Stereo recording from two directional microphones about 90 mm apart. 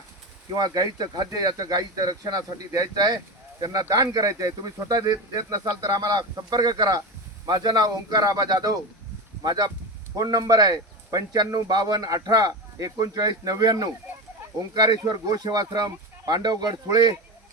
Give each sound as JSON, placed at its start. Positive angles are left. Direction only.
{"t": 0.5, "sound": "speech", "side_deg": -45}